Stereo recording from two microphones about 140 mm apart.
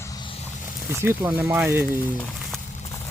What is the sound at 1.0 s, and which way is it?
Speech, 15° right (ahead or behind).